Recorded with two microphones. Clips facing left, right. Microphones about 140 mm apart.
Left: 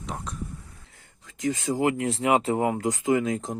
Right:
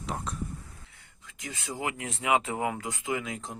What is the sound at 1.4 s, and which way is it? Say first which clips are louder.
Speech: left 11 dB; 40° left (ahead or behind).